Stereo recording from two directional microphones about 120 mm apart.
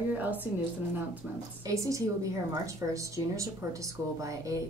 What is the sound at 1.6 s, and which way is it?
Speech, 25° right (ahead or behind).